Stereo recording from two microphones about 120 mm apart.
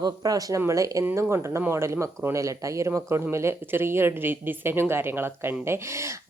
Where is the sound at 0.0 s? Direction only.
30° right (ahead or behind).